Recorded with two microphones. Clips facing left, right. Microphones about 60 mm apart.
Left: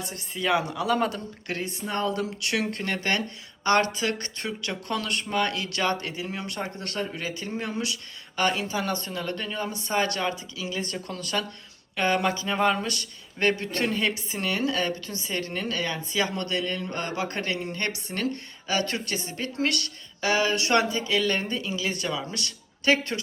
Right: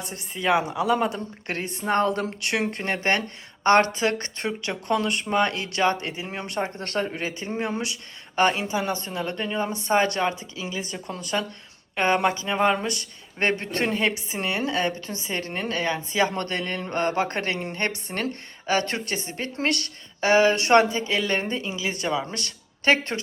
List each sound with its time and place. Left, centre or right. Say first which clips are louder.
0.0 s speech: right 2 dB; right
1.5 s speech: right 5 dB; right
10.7 s speech: left 1 dB; centre; by 23.2 s right